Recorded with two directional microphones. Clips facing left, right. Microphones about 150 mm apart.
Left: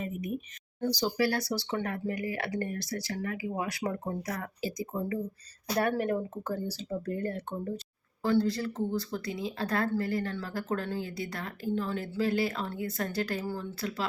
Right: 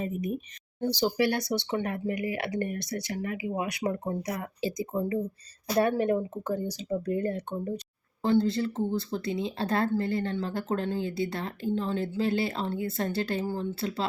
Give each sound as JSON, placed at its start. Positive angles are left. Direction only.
{"t": 0.8, "sound": "speech", "side_deg": -25}